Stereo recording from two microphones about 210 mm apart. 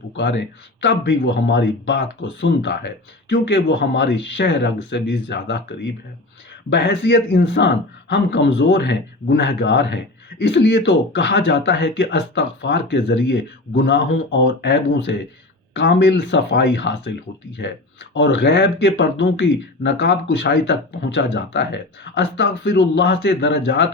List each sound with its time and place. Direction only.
0.2 s speech: 55° left (ahead or behind)